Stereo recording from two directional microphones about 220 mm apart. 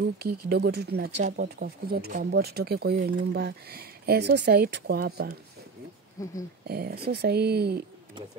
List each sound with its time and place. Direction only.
0.5 s speech: 50° right (ahead or behind)
6.2 s speech: 15° left (ahead or behind)
6.7 s speech: 45° right (ahead or behind)